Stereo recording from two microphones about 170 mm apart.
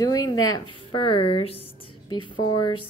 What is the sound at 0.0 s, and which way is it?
A woman's voice, 25° left (ahead or behind).